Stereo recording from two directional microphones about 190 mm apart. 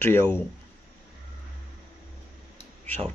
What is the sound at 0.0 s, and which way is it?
Speech, 10° left (ahead or behind).